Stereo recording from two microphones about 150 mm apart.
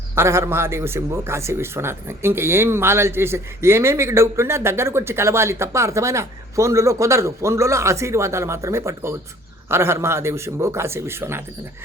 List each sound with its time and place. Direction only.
0.2 s a man's voice: 20° right (ahead or behind)